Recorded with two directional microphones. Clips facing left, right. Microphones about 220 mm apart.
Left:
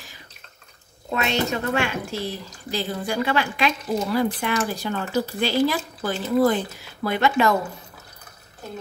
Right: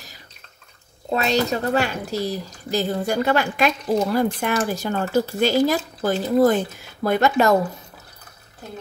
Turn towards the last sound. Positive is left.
turn(degrees=-40)  # may be behind; listen again after turning